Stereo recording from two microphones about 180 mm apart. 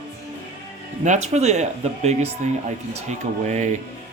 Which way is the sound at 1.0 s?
40° right (ahead or behind).